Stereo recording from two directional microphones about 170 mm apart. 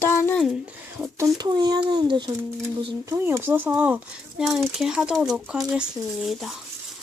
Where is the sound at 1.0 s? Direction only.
15° right (ahead or behind).